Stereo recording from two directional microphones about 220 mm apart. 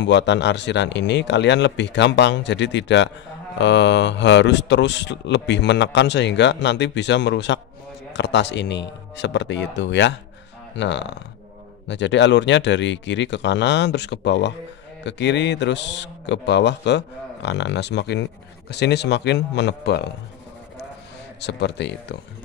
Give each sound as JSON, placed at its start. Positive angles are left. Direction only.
{"t": 0.0, "sound": "speech", "side_deg": 55}
{"t": 21.4, "sound": "speech", "side_deg": 50}